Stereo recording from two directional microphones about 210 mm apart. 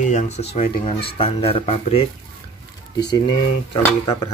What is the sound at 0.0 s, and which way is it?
Speech, 35° left (ahead or behind).